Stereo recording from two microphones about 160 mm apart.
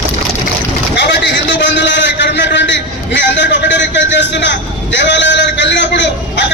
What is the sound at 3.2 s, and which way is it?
Vehicle, 90° left.